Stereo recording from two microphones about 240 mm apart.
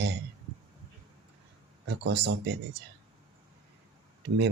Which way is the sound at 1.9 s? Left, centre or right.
Right.